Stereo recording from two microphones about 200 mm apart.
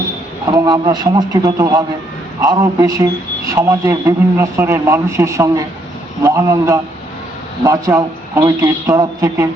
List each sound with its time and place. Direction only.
0.4 s a man's voice: 20° right (ahead or behind)